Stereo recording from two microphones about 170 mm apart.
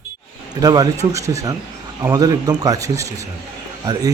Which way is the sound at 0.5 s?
20° right (ahead or behind).